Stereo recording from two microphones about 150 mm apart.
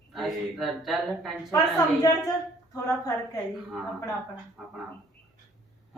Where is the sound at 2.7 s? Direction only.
20° left (ahead or behind).